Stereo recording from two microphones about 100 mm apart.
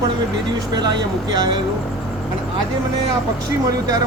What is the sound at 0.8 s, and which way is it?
Speech, 45° right (ahead or behind).